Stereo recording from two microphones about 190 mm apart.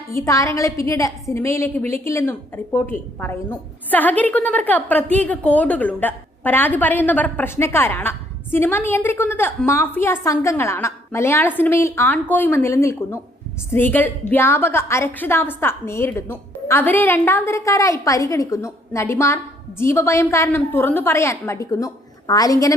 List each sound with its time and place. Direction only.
0.1 s a woman's voice: 15° left (ahead or behind)